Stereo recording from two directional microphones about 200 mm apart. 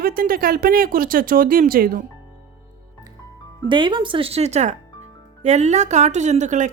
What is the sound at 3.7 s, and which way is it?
Speech, 25° right (ahead or behind).